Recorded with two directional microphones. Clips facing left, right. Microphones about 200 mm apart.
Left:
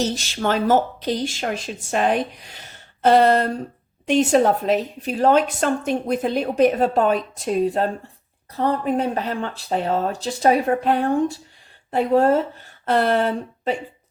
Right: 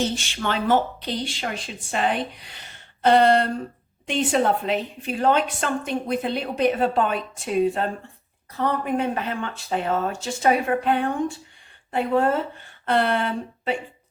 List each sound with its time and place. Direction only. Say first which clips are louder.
0.0 s a woman's voice: left 3 dB; 40° left (ahead or behind)